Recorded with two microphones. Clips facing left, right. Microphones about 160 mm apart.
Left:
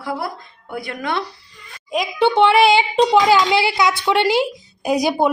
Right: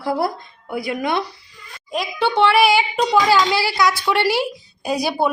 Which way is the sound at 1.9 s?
15° left (ahead or behind).